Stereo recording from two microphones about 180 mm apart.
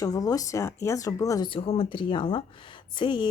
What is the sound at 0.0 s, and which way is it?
Speech, 20° left (ahead or behind).